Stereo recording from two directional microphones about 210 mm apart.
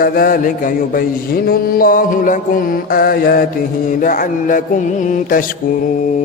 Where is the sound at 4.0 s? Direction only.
40° left (ahead or behind).